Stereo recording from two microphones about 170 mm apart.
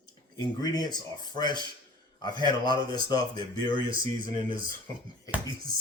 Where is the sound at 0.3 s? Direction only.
25° left (ahead or behind).